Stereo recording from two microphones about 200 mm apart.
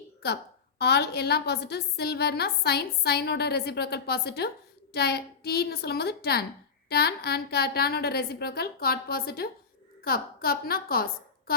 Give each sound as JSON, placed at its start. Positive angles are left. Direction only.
{"t": 0.2, "sound": "a woman's voice", "side_deg": 50}